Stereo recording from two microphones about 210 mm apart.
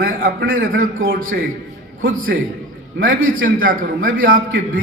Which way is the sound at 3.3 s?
40° right (ahead or behind).